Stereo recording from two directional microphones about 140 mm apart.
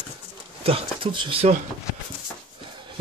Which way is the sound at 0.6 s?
40° right (ahead or behind).